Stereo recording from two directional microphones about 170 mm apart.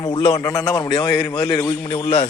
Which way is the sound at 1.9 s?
35° left (ahead or behind).